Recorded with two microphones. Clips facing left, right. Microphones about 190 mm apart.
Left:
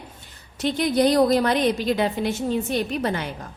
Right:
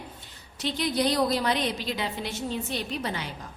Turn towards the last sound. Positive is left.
turn(degrees=50)  # may be behind; listen again after turning